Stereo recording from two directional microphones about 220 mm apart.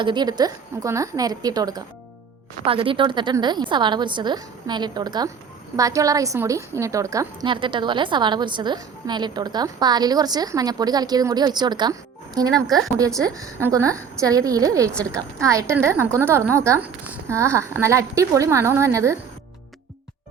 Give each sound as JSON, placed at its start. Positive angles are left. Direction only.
{"t": 0.0, "sound": "a woman's voice", "side_deg": -20}
{"t": 12.6, "sound": "a woman's voice", "side_deg": 0}
{"t": 13.1, "sound": "a woman's voice", "side_deg": -15}